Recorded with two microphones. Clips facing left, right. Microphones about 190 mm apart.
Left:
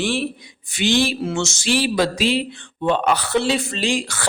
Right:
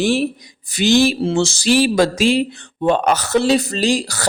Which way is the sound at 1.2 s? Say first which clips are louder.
Right 6 dB; 30° right (ahead or behind).